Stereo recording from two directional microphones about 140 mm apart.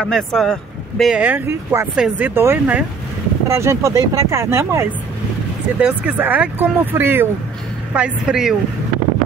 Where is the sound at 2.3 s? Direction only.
15° right (ahead or behind).